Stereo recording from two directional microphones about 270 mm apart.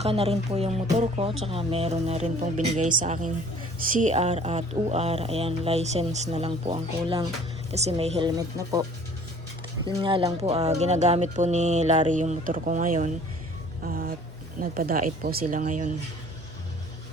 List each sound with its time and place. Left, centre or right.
0.0 s speech: right
9.8 s speech: centre